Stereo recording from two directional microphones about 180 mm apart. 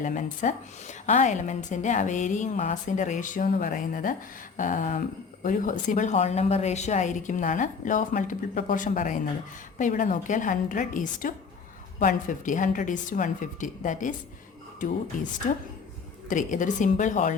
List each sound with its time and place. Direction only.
0.0 s speech: 45° left (ahead or behind)
15.4 s speech: 45° left (ahead or behind)